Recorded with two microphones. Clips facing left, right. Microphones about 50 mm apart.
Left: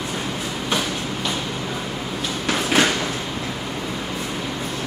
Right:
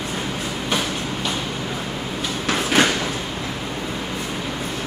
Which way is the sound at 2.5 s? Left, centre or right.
Centre.